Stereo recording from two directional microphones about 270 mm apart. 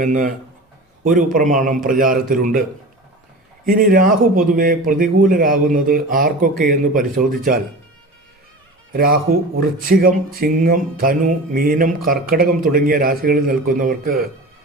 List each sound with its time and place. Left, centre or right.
0.0 s a man's voice: right
3.7 s music: right
8.9 s music: right